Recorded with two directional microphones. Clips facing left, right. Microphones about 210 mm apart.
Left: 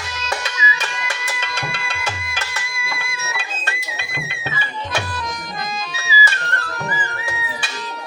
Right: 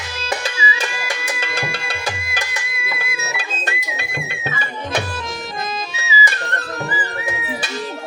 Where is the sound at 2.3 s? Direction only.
15° right (ahead or behind).